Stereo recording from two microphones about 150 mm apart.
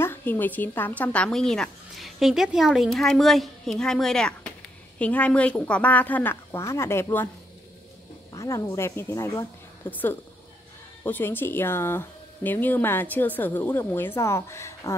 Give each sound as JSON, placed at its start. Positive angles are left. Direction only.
{"t": 0.0, "sound": "a woman's voice", "side_deg": 15}
{"t": 8.3, "sound": "a woman's voice", "side_deg": 20}